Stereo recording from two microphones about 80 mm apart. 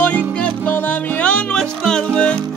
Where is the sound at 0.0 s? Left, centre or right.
Centre.